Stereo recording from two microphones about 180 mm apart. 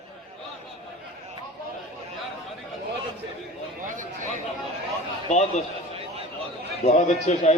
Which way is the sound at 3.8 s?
45° right (ahead or behind).